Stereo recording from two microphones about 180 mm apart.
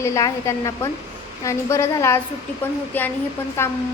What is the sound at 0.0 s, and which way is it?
A woman's voice, 15° left (ahead or behind).